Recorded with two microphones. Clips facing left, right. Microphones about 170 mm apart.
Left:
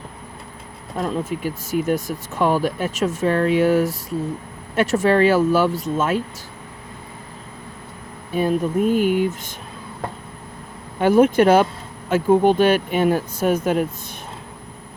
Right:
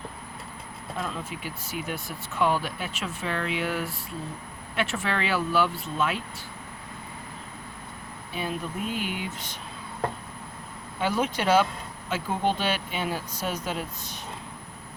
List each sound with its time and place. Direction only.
0.9 s speech: 45° left (ahead or behind)
8.3 s speech: 45° left (ahead or behind)
11.0 s speech: 50° left (ahead or behind)